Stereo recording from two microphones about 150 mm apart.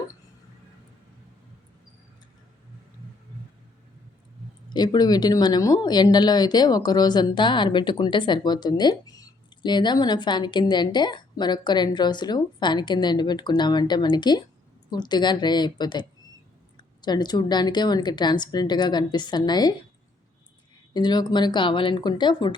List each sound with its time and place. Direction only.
4.7 s speech: 30° left (ahead or behind)
20.9 s speech: 30° left (ahead or behind)